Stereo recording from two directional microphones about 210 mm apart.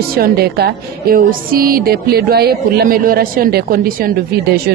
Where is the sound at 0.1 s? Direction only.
45° right (ahead or behind).